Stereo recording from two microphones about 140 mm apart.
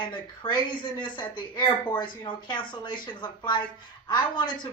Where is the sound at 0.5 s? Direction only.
35° left (ahead or behind).